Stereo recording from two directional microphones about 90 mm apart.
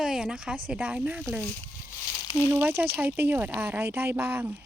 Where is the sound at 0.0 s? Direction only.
5° right (ahead or behind).